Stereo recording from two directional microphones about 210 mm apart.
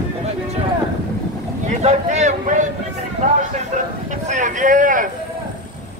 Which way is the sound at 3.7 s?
35° right (ahead or behind).